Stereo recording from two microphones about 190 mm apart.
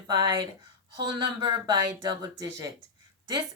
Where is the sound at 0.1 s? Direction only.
20° right (ahead or behind).